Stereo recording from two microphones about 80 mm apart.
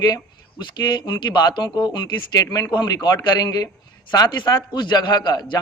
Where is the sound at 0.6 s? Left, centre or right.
Left.